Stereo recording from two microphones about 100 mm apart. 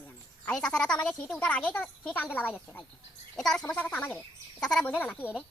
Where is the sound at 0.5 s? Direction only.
10° left (ahead or behind).